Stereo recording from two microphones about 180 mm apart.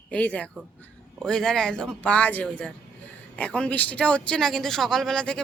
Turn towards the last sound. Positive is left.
turn(degrees=5)  # may be behind; listen again after turning